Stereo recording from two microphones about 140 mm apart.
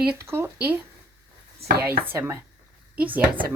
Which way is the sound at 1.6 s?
45° right (ahead or behind).